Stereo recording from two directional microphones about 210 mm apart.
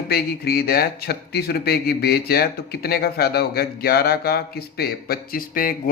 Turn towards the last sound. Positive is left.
turn(degrees=45)  # may be behind; listen again after turning